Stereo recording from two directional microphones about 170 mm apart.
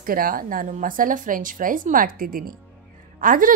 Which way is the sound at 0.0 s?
55° right (ahead or behind).